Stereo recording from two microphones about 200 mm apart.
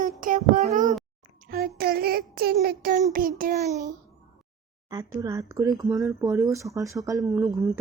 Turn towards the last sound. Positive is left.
turn(degrees=-15)  # may be behind; listen again after turning